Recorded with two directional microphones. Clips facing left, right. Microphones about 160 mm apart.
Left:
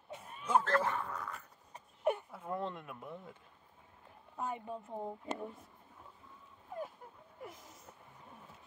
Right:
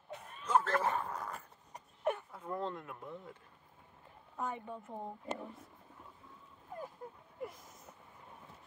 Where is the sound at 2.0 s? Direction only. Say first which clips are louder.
Left 2 dB; 10° left (ahead or behind).